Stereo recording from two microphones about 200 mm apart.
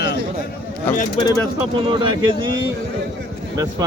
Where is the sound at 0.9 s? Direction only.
10° left (ahead or behind).